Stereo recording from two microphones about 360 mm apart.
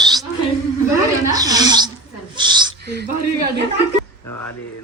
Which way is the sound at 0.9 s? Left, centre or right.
Centre.